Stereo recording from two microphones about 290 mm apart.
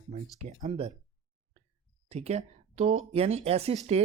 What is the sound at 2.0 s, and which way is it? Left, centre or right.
Speech, right.